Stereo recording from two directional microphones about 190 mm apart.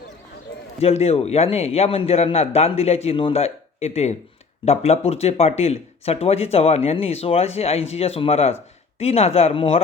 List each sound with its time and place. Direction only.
0.8 s speech: 35° left (ahead or behind)